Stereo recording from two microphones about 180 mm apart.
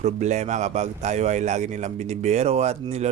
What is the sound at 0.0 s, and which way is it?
Speech, 40° right (ahead or behind).